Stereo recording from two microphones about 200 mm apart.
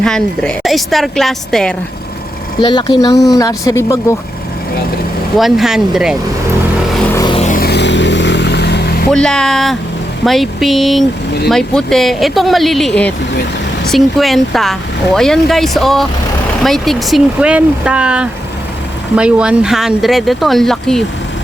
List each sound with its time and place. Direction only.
0.0 s speech: 5° left (ahead or behind)
2.6 s speech: 20° left (ahead or behind)
5.4 s speech: centre (ahead or behind)
7.1 s music: 15° left (ahead or behind)
7.3 s vehicle: 40° left (ahead or behind); by 9.0 s 55° left (ahead or behind)
9.1 s speech: 5° left (ahead or behind)